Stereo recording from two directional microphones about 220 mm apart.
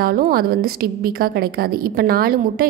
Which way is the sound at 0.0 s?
40° right (ahead or behind).